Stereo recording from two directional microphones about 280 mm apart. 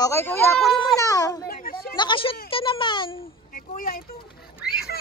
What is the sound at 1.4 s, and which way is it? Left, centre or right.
Speech, left.